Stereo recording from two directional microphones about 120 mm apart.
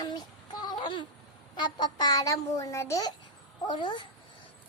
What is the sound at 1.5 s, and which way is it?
A child's voice, 40° left (ahead or behind).